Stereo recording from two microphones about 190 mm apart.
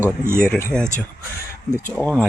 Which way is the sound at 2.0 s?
5° left (ahead or behind).